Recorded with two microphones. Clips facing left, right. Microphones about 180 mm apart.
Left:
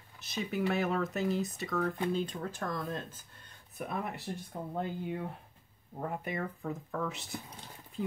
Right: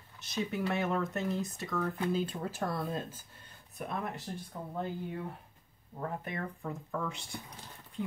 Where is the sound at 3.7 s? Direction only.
5° left (ahead or behind).